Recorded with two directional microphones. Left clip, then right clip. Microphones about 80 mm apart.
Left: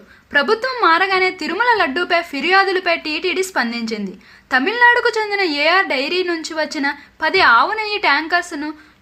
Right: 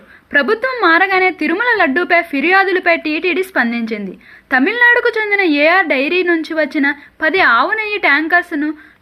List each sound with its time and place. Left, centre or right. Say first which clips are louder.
0.3 s a woman's voice: right 2 dB; right